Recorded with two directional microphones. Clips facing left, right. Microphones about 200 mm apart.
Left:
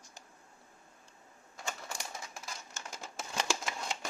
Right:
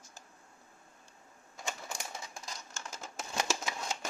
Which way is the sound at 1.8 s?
Centre (ahead or behind).